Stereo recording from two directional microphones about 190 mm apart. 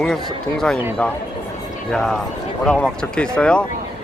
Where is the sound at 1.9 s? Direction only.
5° left (ahead or behind).